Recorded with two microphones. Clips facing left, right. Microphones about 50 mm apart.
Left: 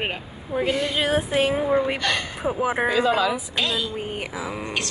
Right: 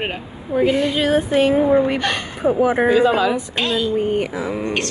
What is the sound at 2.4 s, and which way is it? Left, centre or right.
Speech, centre.